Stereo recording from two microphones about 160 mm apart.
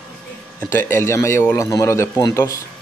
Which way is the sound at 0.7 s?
15° left (ahead or behind).